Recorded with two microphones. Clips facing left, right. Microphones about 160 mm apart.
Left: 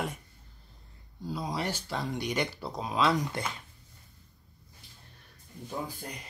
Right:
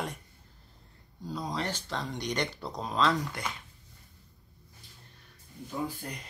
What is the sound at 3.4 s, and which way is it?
Speech, 25° left (ahead or behind).